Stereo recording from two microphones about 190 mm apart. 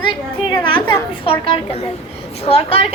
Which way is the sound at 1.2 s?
30° left (ahead or behind).